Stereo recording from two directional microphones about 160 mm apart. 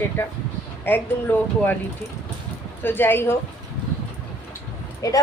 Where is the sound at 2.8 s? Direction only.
15° left (ahead or behind).